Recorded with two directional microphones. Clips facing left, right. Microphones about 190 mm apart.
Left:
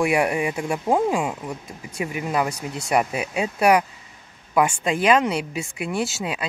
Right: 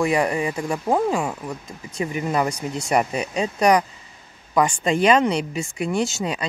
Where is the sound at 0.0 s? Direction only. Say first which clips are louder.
Even; 10° left (ahead or behind).